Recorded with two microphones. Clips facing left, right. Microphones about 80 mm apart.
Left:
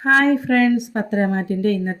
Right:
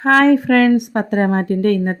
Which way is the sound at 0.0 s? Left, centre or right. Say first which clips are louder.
Right 4 dB; right.